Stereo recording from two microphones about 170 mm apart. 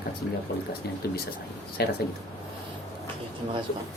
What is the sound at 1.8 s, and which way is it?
Speech, 70° left (ahead or behind).